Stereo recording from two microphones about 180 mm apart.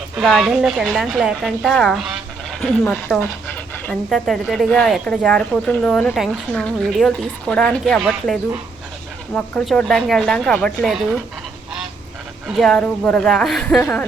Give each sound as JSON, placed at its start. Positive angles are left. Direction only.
{"t": 0.2, "sound": "speech", "side_deg": 0}
{"t": 12.5, "sound": "speech", "side_deg": 5}